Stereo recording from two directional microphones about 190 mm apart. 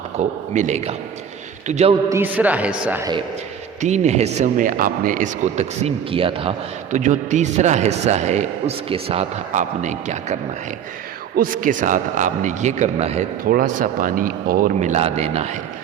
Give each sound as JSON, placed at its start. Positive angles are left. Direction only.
{"t": 0.2, "sound": "a man's voice", "side_deg": -40}
{"t": 2.0, "sound": "speech", "side_deg": -10}
{"t": 3.8, "sound": "a man's voice", "side_deg": -40}
{"t": 6.9, "sound": "a man's voice", "side_deg": -40}
{"t": 11.3, "sound": "a man's voice", "side_deg": -45}
{"t": 13.5, "sound": "speech", "side_deg": -50}